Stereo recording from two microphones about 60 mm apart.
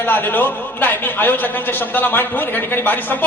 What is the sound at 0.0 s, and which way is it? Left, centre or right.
A man's voice, left.